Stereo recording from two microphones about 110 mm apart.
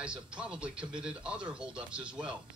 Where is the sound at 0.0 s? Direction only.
10° right (ahead or behind).